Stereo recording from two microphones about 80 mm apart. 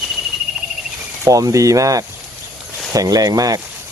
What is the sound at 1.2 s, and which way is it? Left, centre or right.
Speech, right.